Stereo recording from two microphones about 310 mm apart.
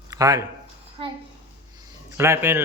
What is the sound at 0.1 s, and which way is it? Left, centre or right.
Speech, centre.